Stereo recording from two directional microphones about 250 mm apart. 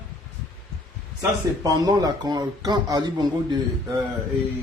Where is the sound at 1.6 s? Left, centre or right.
Centre.